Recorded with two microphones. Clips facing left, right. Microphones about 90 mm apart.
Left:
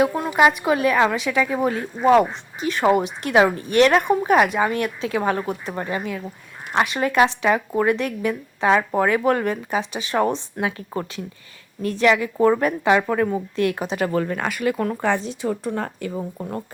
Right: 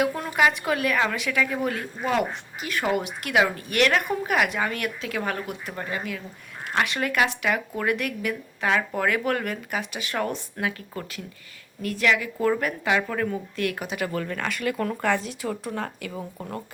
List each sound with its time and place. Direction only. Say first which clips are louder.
0.3 s speech: left 5 dB; 20° left (ahead or behind); by 16.1 s 35° left (ahead or behind)